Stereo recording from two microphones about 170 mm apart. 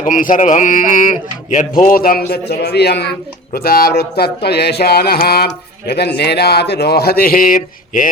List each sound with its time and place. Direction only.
0.0 s a man's voice: 50° left (ahead or behind)